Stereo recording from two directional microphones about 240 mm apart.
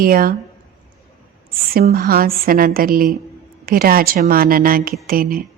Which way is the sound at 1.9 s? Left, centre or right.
Right.